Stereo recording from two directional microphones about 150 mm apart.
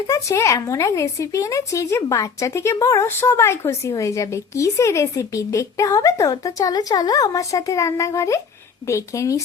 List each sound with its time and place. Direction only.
0.1 s speech: 20° left (ahead or behind)